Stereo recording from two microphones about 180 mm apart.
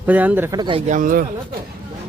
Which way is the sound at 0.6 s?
25° right (ahead or behind).